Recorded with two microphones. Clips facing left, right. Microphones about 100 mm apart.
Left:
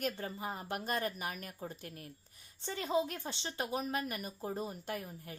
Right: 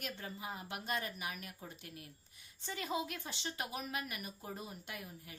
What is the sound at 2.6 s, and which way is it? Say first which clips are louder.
A woman's voice: left 6 dB; 30° left (ahead or behind).